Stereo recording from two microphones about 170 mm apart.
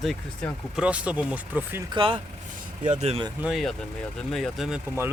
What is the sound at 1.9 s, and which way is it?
Speech, 30° right (ahead or behind).